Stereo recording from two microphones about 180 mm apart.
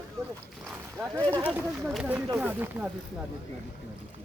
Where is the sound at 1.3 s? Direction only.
10° right (ahead or behind).